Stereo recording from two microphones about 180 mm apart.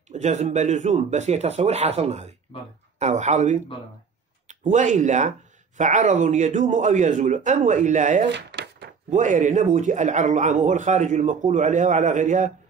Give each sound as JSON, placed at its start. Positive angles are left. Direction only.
{"t": 0.1, "sound": "speech", "side_deg": -40}
{"t": 8.3, "sound": "a sound", "side_deg": -80}
{"t": 9.1, "sound": "speech", "side_deg": -45}